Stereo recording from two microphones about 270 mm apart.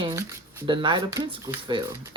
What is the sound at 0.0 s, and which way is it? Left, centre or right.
Speech, centre.